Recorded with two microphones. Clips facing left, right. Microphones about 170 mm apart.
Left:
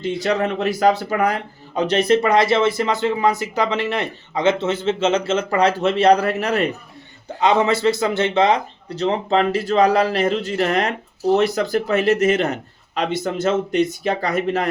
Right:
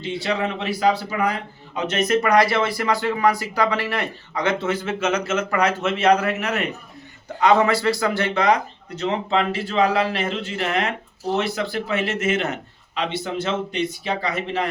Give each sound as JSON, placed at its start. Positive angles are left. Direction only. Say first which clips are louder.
{"t": 0.0, "sound": "speech", "louder": "left 4 dB", "side_deg": 45}
{"t": 7.3, "sound": "a man's voice", "louder": "even", "side_deg": 25}